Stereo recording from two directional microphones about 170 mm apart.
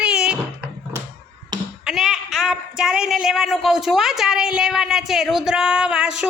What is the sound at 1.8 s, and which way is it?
Speech, centre (ahead or behind).